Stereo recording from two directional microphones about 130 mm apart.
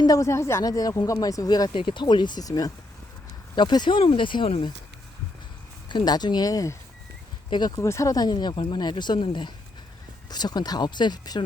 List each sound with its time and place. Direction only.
0.0 s speech: 25° left (ahead or behind)
5.9 s speech: 35° left (ahead or behind)
7.8 s speech: 25° left (ahead or behind)